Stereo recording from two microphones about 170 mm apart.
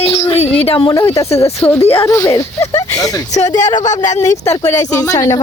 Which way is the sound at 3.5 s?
45° left (ahead or behind).